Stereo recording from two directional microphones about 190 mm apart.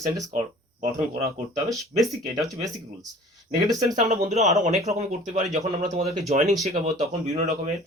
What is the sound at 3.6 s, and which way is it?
Speech, 20° right (ahead or behind).